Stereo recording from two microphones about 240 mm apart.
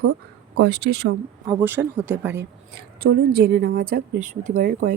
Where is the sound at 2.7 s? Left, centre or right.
Right.